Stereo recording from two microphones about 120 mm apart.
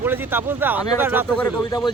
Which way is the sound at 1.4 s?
35° left (ahead or behind).